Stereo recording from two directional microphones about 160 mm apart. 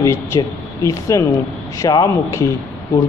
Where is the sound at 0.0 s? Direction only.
20° left (ahead or behind).